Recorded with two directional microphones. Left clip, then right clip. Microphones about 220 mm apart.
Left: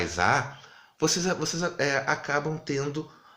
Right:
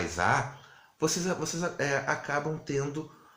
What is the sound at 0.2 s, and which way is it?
Speech, 30° left (ahead or behind).